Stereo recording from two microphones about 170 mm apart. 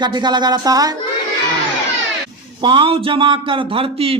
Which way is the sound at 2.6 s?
30° right (ahead or behind).